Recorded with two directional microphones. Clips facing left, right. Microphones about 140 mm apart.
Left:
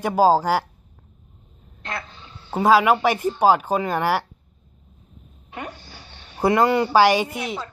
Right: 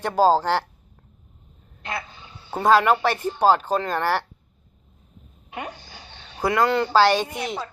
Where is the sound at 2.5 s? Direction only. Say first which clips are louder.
Left 1 dB; 5° left (ahead or behind).